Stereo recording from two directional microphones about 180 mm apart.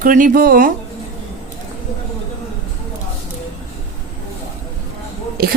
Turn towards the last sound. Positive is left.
turn(degrees=-55)  # may be behind; listen again after turning